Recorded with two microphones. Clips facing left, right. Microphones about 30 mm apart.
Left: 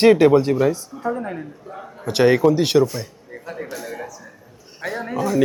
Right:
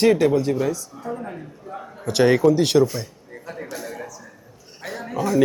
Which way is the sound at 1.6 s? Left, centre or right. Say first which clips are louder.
Even; centre.